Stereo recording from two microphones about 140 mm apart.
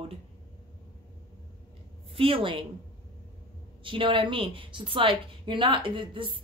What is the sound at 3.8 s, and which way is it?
Speech, 35° right (ahead or behind).